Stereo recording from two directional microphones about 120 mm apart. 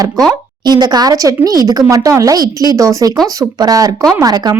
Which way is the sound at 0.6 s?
35° right (ahead or behind).